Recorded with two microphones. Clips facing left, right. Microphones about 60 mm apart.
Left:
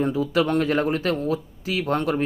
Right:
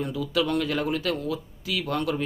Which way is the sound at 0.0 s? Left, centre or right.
Left.